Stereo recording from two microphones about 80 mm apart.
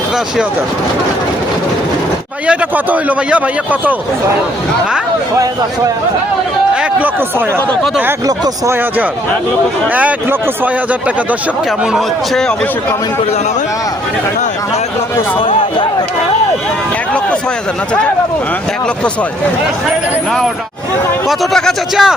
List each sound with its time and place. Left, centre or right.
2.5 s a man's voice: centre
7.2 s a man's voice: right
9.9 s a man's voice: centre
11.8 s a man's voice: centre
12.3 s a man's voice: centre
15.4 s a sound: left
21.2 s speech: centre